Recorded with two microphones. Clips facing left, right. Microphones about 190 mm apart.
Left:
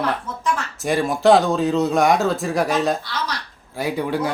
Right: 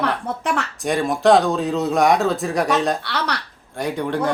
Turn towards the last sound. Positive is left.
turn(degrees=5)  # may be behind; listen again after turning